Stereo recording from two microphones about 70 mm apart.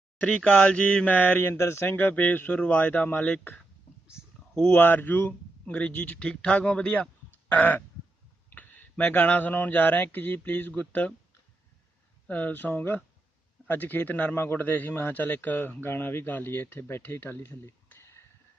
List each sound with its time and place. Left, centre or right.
0.2 s a man's voice: centre
4.7 s a man's voice: left
12.3 s a man's voice: left
17.8 s a sound: left